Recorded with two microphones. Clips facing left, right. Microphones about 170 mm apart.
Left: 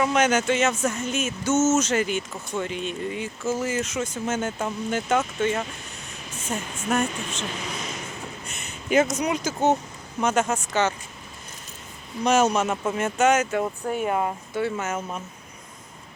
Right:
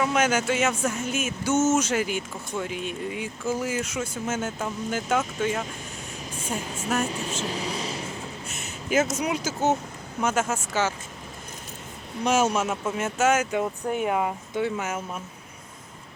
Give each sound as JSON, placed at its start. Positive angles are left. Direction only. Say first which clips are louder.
{"t": 0.0, "sound": "speech", "louder": "left 2 dB", "side_deg": -5}
{"t": 7.4, "sound": "vehicle", "louder": "right 3 dB", "side_deg": -35}
{"t": 8.4, "sound": "a sound", "louder": "left 3 dB", "side_deg": -5}
{"t": 9.1, "sound": "speech", "louder": "left 2 dB", "side_deg": -5}
{"t": 12.2, "sound": "speech", "louder": "left 2 dB", "side_deg": -5}